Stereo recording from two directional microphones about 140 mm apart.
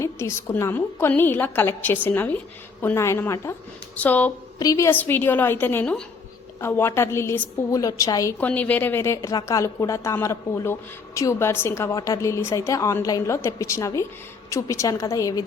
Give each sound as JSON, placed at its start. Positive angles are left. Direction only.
{"t": 0.0, "sound": "a woman's voice", "side_deg": 20}
{"t": 4.6, "sound": "a woman's voice", "side_deg": 25}
{"t": 4.9, "sound": "a woman's voice", "side_deg": 15}
{"t": 8.4, "sound": "a woman's voice", "side_deg": 10}